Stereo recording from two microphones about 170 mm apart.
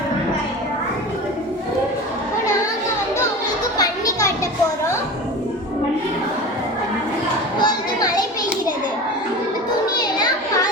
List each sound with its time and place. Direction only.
7.6 s children playing: 25° left (ahead or behind)
9.9 s children playing: 25° left (ahead or behind)